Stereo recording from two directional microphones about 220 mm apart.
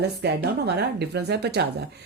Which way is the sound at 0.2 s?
50° right (ahead or behind).